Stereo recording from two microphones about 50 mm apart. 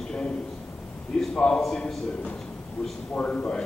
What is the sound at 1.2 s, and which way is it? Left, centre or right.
Speech, centre.